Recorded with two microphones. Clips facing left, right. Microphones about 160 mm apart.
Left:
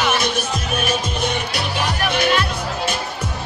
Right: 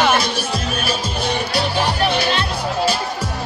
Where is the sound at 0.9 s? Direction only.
30° right (ahead or behind).